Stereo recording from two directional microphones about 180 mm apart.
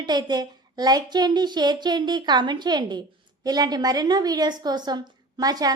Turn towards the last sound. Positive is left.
turn(degrees=-20)  # may be behind; listen again after turning